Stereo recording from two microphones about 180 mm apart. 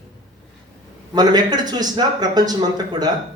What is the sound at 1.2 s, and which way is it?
Speech, 20° right (ahead or behind).